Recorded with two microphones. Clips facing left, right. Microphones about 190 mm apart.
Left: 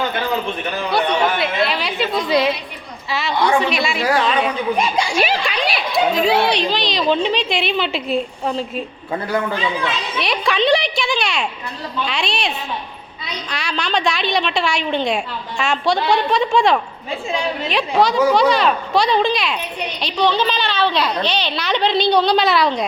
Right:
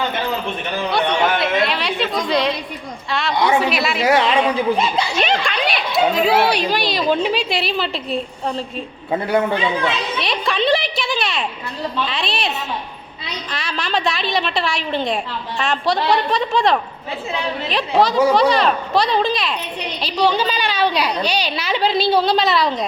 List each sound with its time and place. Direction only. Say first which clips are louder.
0.9 s a woman's voice: even; centre (ahead or behind)
3.3 s a woman's voice: even; 15° right (ahead or behind)
3.6 s speech: even; 5° right (ahead or behind)
4.0 s a woman's voice: right 3 dB; 25° right (ahead or behind)
4.8 s speech: left 1 dB; 10° left (ahead or behind)
9.2 s a woman's voice: right 3 dB; 25° right (ahead or behind)
10.2 s a sound: left 2 dB; centre (ahead or behind)
12.0 s a woman's voice: left 1 dB; centre (ahead or behind)